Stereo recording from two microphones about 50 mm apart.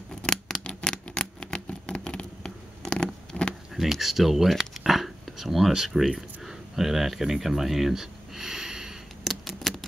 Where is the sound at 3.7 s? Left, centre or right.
Centre.